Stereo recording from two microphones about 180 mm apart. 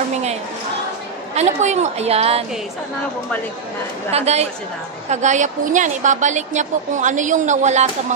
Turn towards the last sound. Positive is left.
turn(degrees=-40)  # may be behind; listen again after turning